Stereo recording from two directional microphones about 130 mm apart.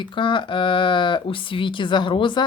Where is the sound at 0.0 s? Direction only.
40° left (ahead or behind).